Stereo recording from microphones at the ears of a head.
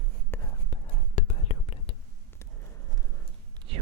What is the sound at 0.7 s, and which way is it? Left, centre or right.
Whispering, left.